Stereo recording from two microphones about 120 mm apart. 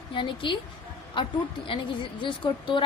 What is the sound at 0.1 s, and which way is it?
Speech, 40° left (ahead or behind).